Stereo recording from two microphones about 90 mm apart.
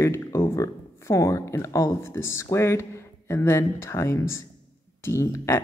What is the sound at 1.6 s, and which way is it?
Speech, 35° left (ahead or behind).